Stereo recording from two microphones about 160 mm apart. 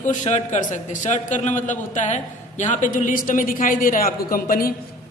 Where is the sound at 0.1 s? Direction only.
45° left (ahead or behind).